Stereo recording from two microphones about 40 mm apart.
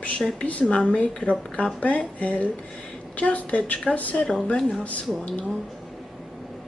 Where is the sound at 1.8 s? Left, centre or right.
Left.